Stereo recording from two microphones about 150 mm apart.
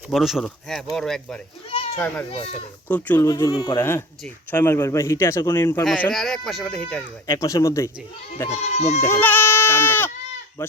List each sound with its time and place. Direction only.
0.1 s speech: centre (ahead or behind)
1.7 s goat: 45° left (ahead or behind)
2.3 s speech: 40° left (ahead or behind)
3.2 s speech: 25° left (ahead or behind)
3.8 s a man's voice: 15° left (ahead or behind)
6.0 s speech: centre (ahead or behind)
7.3 s speech: 20° left (ahead or behind)
8.4 s speech: 50° left (ahead or behind)
9.0 s a man's voice: 15° left (ahead or behind)